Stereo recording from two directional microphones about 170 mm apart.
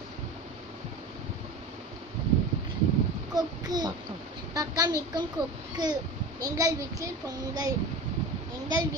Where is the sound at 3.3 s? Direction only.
25° right (ahead or behind).